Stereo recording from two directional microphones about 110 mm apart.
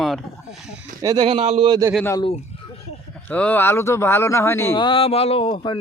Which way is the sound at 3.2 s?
10° left (ahead or behind).